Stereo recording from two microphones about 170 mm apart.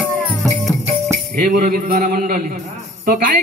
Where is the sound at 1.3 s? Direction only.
60° right (ahead or behind).